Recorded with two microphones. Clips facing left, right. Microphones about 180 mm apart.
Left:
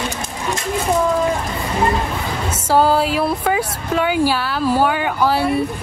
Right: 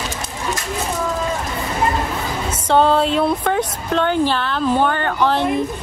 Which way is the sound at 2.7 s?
5° left (ahead or behind).